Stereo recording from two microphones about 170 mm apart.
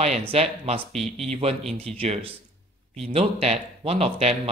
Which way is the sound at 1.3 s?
35° right (ahead or behind).